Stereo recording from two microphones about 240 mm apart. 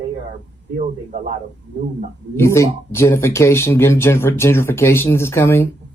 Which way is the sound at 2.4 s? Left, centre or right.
Centre.